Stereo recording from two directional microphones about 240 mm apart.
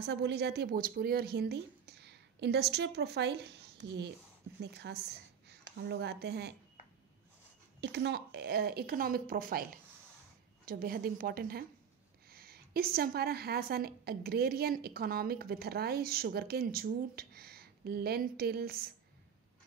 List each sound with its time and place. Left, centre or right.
0.0 s a woman's voice: right
7.8 s a woman's voice: right